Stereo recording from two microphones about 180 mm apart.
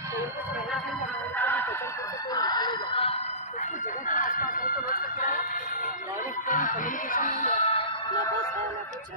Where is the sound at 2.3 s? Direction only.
20° left (ahead or behind); by 5.3 s 50° left (ahead or behind).